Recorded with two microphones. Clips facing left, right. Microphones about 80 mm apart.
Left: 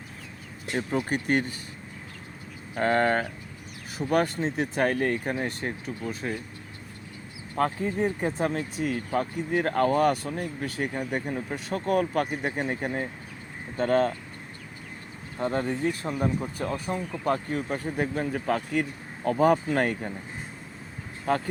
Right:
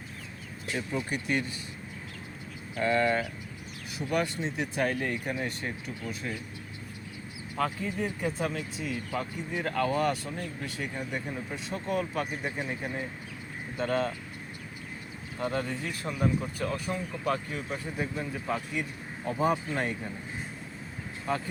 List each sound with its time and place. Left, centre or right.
0.7 s speech: left
2.7 s speech: left
7.5 s speech: left
15.4 s speech: left
21.2 s speech: left